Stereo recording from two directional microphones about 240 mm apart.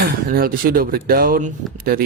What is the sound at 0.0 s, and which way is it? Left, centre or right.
Speech, right.